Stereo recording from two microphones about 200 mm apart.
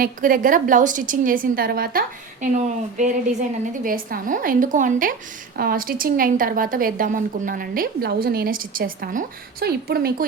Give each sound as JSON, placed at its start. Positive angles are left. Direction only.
{"t": 0.0, "sound": "a woman's voice", "side_deg": -45}